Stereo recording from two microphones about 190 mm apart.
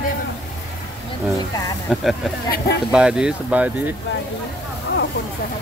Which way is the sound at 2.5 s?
55° left (ahead or behind).